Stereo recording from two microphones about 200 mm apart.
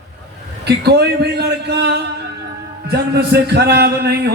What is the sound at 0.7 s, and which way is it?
A man's voice, 55° right (ahead or behind).